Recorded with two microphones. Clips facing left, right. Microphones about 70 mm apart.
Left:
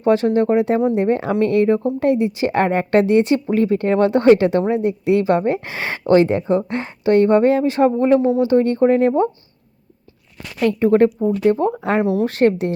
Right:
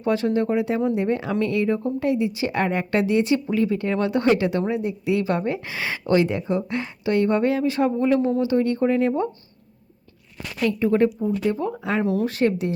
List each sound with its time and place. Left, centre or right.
0.0 s speech: left
10.6 s speech: left